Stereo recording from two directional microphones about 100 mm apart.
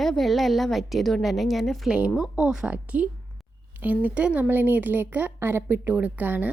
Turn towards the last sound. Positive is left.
turn(degrees=-15)  # may be behind; listen again after turning